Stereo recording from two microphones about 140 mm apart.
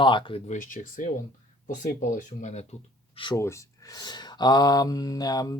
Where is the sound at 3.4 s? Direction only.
20° left (ahead or behind).